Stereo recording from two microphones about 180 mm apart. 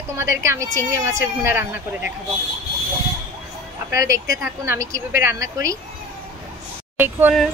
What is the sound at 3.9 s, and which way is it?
A woman's voice, 15° right (ahead or behind).